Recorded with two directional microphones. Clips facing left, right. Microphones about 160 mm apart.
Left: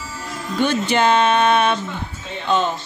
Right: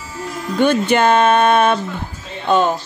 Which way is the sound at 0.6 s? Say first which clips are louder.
Right 4 dB; 50° right (ahead or behind).